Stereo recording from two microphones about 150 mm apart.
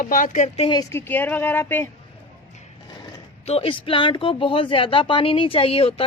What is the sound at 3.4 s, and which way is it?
Speech, 40° left (ahead or behind).